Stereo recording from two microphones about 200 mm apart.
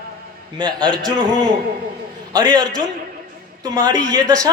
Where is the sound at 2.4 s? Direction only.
20° right (ahead or behind).